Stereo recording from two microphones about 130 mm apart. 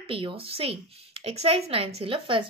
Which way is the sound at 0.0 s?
45° right (ahead or behind).